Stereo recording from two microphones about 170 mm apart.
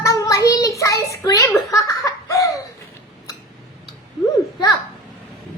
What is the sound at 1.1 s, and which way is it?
Giggle, 20° left (ahead or behind).